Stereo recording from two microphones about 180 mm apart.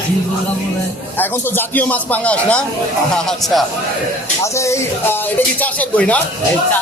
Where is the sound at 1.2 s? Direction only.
10° left (ahead or behind).